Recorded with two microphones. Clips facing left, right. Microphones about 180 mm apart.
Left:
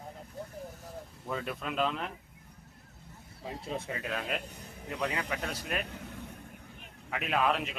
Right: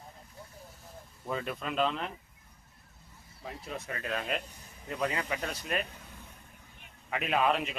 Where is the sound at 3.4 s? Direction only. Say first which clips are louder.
Left 3 dB; 30° left (ahead or behind).